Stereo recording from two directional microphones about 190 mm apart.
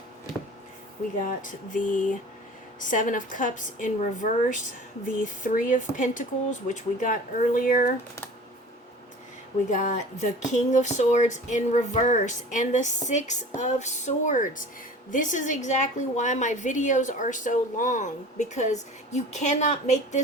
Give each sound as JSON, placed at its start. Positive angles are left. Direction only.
{"t": 1.2, "sound": "speech", "side_deg": 45}
{"t": 9.7, "sound": "a woman's voice", "side_deg": 40}